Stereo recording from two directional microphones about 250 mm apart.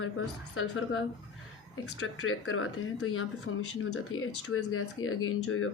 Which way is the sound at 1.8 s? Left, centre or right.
Left.